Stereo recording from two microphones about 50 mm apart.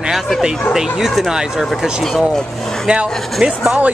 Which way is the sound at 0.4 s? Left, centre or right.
Centre.